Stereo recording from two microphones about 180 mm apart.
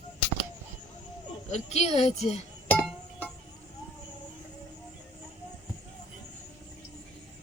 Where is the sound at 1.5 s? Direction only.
40° left (ahead or behind).